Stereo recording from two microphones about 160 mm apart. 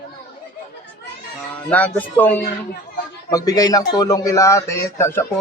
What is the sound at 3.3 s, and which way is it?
Speech, 25° left (ahead or behind).